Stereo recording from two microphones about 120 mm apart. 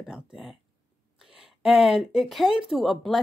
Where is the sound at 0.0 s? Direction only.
5° right (ahead or behind).